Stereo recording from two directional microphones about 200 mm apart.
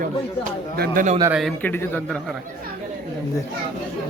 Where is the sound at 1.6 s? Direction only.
10° left (ahead or behind).